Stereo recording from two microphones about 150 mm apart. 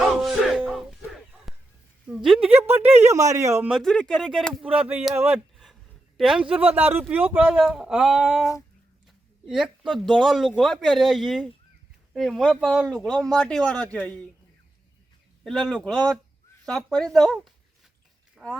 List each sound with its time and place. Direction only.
0.2 s music: centre (ahead or behind)
1.5 s a sound: centre (ahead or behind)
2.5 s a man's voice: 15° right (ahead or behind)
3.7 s speech: centre (ahead or behind)
15.4 s speech: 5° left (ahead or behind)